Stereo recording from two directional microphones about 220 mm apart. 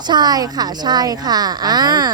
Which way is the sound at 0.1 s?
20° right (ahead or behind).